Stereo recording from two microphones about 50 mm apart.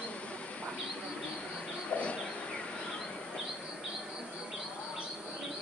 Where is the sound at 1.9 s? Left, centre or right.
Left.